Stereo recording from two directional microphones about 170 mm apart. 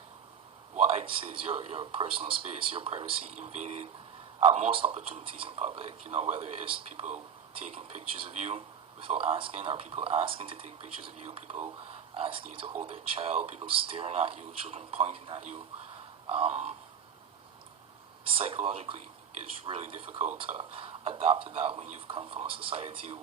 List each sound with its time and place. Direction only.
0.8 s speech: 35° right (ahead or behind)
18.3 s speech: 30° right (ahead or behind)